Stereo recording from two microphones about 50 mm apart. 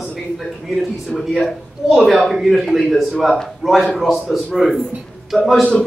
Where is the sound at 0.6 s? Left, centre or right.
Centre.